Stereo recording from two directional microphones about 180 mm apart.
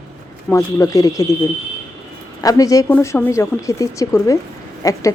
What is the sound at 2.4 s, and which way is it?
A woman's voice, 20° left (ahead or behind).